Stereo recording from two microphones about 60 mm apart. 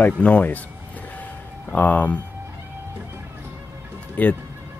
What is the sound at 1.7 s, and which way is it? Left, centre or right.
Speech, left.